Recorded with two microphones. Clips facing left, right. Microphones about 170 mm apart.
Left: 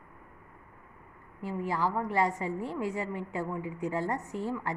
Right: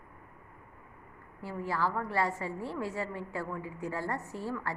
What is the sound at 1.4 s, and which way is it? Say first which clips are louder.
A woman's voice: left 2 dB; 15° left (ahead or behind).